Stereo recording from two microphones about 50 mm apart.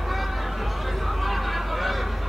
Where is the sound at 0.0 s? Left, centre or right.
Centre.